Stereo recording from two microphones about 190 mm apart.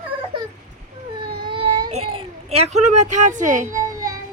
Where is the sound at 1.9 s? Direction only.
30° right (ahead or behind).